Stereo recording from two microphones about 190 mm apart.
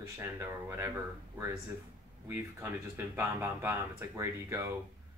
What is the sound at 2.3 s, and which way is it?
Speech, 10° right (ahead or behind).